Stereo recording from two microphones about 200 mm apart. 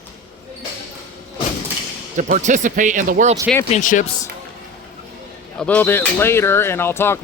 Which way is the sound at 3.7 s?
40° left (ahead or behind).